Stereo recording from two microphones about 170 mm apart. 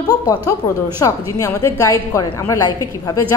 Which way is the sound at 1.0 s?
20° left (ahead or behind).